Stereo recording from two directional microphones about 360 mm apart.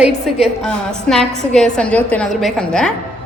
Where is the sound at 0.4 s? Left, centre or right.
Centre.